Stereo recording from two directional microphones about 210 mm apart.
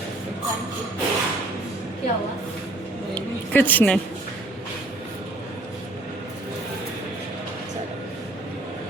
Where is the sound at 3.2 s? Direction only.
10° left (ahead or behind).